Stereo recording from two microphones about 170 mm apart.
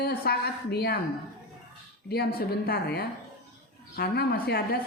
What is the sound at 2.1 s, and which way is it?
A woman's voice, 65° left (ahead or behind).